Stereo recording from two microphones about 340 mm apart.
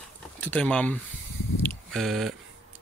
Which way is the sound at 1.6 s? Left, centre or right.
Centre.